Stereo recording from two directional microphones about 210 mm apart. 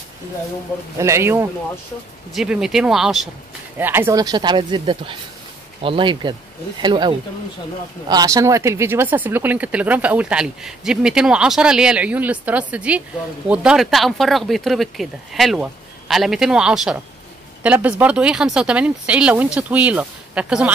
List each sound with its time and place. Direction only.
0.9 s speech: 15° right (ahead or behind)